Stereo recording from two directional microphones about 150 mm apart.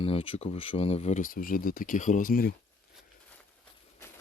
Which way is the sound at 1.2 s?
70° left (ahead or behind).